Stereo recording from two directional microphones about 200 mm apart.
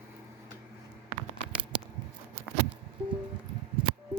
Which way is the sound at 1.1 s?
35° right (ahead or behind).